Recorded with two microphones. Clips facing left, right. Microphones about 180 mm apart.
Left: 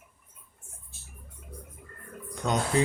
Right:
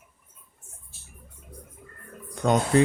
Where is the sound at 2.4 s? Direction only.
55° right (ahead or behind).